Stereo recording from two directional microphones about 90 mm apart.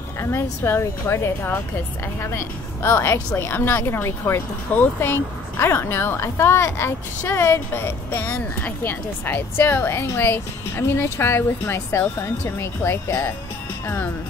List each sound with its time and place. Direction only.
0.2 s a woman's voice: 30° left (ahead or behind)